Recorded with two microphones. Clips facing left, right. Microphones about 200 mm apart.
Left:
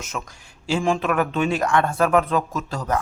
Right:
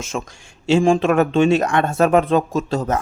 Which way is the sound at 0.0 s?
25° right (ahead or behind).